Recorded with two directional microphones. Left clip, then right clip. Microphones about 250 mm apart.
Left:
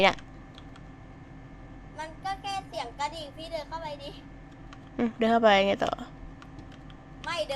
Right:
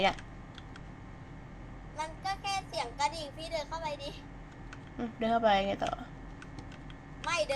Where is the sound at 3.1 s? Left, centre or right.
Right.